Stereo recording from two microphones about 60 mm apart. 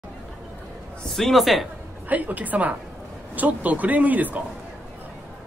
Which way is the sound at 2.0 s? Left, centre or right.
Right.